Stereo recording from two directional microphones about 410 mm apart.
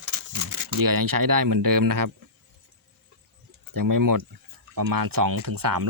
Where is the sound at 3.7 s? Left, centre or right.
Right.